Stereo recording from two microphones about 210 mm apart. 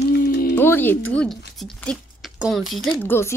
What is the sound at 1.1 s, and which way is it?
Speech, 5° left (ahead or behind).